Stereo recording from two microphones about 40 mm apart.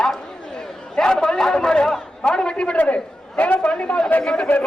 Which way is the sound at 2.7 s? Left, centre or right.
Left.